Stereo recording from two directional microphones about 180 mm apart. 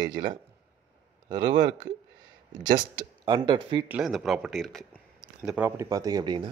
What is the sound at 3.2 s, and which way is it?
Speech, 25° right (ahead or behind).